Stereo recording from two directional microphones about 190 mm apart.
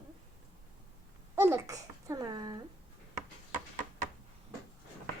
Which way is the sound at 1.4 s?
15° right (ahead or behind).